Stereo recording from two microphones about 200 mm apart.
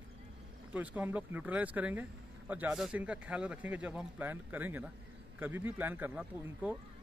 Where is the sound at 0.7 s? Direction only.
10° right (ahead or behind).